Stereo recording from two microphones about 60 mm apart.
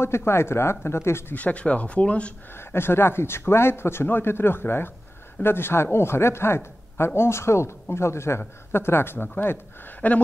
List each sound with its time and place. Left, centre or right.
0.0 s speech: left
1.3 s speech: left
2.5 s speech: left